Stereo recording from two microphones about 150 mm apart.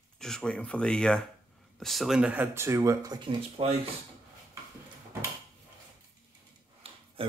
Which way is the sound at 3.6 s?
40° right (ahead or behind).